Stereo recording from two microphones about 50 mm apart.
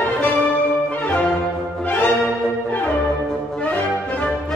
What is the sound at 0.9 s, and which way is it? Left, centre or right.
Music, left.